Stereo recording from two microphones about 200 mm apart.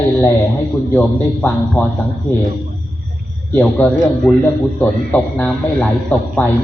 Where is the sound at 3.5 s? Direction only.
5° left (ahead or behind).